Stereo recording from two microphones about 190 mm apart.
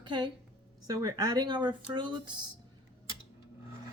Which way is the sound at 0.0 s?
25° right (ahead or behind).